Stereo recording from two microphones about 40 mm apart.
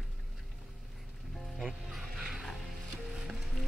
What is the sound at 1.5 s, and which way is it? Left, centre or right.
Music, centre.